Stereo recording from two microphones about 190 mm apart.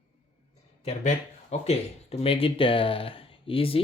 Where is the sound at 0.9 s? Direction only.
35° left (ahead or behind).